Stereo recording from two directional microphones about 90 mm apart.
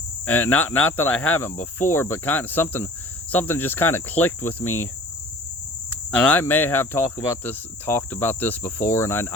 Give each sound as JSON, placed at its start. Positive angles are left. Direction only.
{"t": 0.3, "sound": "cricket", "side_deg": 20}
{"t": 6.1, "sound": "cricket", "side_deg": 15}
{"t": 6.4, "sound": "cricket", "side_deg": 25}